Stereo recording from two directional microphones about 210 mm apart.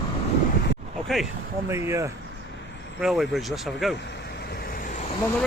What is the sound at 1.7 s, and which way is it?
Speech, 15° right (ahead or behind).